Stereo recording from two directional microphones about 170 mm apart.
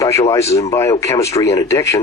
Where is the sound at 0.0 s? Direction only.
15° left (ahead or behind).